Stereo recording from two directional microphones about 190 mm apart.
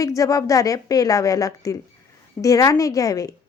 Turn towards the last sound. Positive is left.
turn(degrees=20)  # may be behind; listen again after turning